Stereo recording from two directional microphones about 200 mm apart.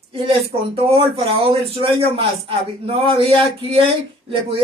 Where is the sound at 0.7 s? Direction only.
30° right (ahead or behind).